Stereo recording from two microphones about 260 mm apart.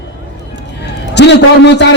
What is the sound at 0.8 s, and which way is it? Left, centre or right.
A man's voice, left.